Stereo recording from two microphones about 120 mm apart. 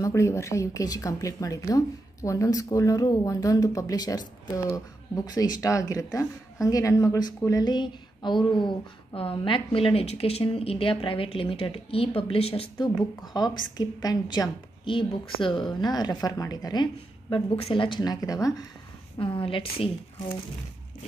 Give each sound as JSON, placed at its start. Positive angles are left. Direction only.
{"t": 0.0, "sound": "a woman's voice", "side_deg": 25}
{"t": 13.3, "sound": "a woman's voice", "side_deg": 35}
{"t": 17.6, "sound": "a woman's voice", "side_deg": 50}
{"t": 19.1, "sound": "speech", "side_deg": 45}